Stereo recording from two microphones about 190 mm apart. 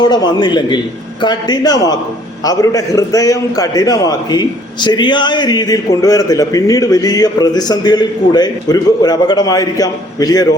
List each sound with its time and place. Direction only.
0.0 s a man's voice: 20° left (ahead or behind)